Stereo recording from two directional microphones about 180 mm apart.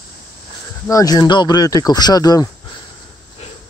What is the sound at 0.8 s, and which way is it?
Speech, 20° left (ahead or behind).